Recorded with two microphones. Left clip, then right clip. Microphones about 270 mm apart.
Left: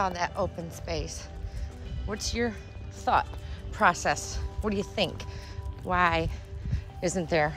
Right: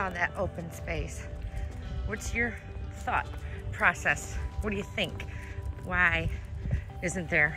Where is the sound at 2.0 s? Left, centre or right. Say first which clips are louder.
Left 1 dB; centre.